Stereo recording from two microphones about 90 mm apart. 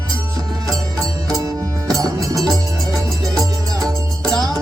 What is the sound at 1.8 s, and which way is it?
Music, 45° right (ahead or behind).